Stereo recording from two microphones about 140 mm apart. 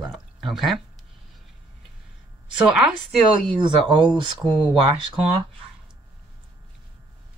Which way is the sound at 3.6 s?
35° right (ahead or behind).